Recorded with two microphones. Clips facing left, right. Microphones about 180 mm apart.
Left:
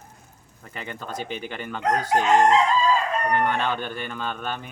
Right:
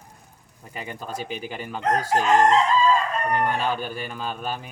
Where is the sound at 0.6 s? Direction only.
10° right (ahead or behind).